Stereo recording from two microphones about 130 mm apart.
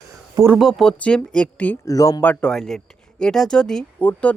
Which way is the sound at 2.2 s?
10° left (ahead or behind).